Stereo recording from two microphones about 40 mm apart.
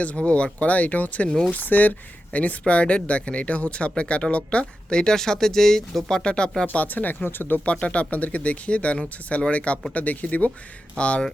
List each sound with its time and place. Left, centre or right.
0.2 s speech: left
6.7 s speech: left
7.6 s speech: left